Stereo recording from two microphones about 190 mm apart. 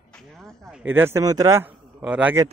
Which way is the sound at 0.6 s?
5° right (ahead or behind).